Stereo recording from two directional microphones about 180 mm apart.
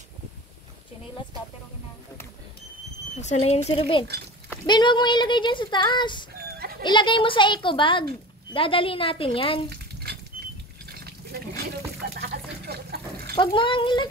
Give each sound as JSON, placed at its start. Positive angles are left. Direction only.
{"t": 3.2, "sound": "speech", "side_deg": 40}
{"t": 9.7, "sound": "stir", "side_deg": -65}
{"t": 10.4, "sound": "patter", "side_deg": -55}
{"t": 10.9, "sound": "a sound", "side_deg": -60}
{"t": 13.4, "sound": "speech", "side_deg": 25}